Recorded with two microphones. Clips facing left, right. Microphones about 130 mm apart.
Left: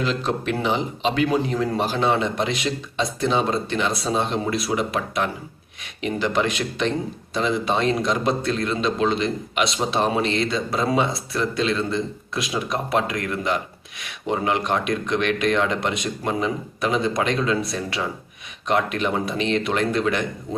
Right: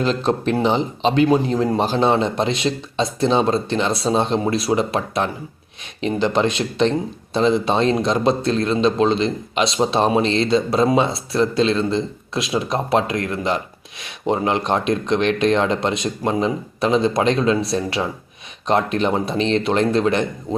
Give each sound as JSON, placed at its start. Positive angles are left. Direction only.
{"t": 0.0, "sound": "a man's voice", "side_deg": -35}